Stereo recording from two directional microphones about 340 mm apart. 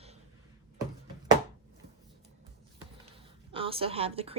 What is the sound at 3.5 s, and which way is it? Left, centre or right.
Speech, centre.